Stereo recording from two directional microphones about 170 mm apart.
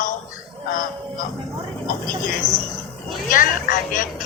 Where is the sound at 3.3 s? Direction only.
55° left (ahead or behind).